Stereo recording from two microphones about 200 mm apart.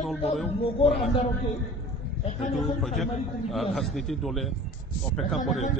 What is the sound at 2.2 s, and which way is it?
Speech, 35° left (ahead or behind).